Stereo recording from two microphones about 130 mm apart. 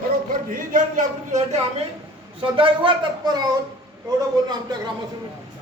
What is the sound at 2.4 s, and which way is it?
Speech, 40° right (ahead or behind).